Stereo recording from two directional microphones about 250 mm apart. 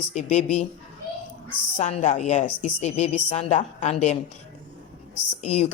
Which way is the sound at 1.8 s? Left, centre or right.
Left.